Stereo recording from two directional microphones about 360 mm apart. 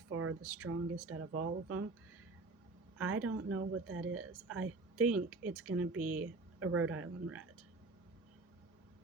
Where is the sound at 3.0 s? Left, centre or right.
Right.